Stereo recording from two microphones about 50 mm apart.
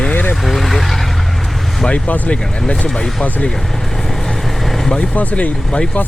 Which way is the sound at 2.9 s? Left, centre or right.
Centre.